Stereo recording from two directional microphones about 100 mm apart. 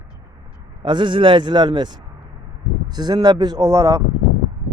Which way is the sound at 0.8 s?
55° right (ahead or behind).